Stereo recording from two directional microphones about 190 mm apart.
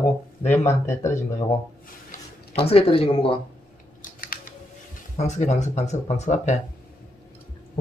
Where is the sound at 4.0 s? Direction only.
45° left (ahead or behind).